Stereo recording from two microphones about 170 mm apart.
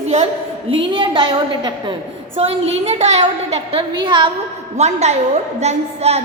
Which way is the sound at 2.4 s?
40° right (ahead or behind).